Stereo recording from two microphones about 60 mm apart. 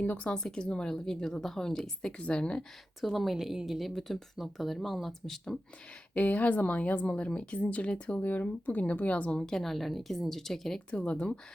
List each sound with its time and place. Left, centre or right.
0.0 s a woman's voice: left
3.0 s speech: centre
6.1 s speech: left
8.2 s speech: left
9.4 s speech: centre
10.9 s speech: left